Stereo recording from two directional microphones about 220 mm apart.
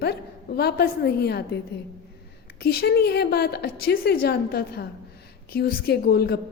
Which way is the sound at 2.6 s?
45° left (ahead or behind).